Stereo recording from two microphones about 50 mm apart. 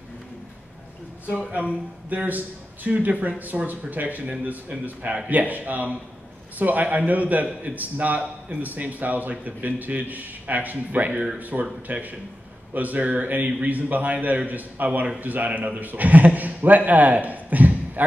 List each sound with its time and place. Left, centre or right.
2.0 s a man's voice: right